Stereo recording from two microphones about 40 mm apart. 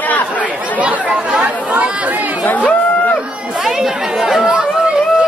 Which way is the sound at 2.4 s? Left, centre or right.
Left.